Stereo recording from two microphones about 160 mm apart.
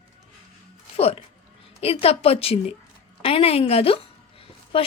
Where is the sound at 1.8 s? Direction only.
40° left (ahead or behind).